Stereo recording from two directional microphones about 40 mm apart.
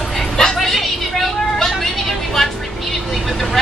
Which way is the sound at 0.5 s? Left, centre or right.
Centre.